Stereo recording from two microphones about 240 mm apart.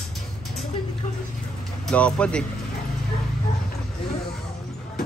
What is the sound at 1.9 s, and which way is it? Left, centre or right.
Speech, centre.